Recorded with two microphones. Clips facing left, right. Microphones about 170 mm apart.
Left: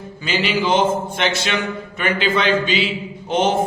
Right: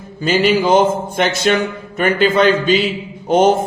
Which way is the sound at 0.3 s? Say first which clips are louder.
Right 6 dB; 45° right (ahead or behind).